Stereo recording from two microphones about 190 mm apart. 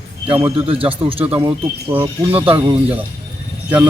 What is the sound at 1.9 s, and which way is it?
Speech, 10° right (ahead or behind).